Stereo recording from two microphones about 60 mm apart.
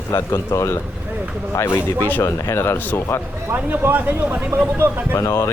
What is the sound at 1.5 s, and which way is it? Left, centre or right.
Speech, left.